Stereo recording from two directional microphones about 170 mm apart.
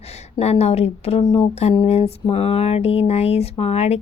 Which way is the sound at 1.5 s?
40° left (ahead or behind).